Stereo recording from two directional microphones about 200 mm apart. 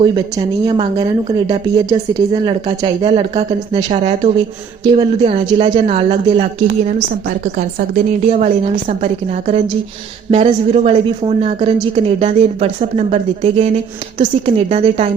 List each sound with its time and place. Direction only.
0.0 s a woman's voice: 20° right (ahead or behind)
7.4 s a woman's voice: 50° right (ahead or behind)
8.4 s a woman's voice: 35° right (ahead or behind)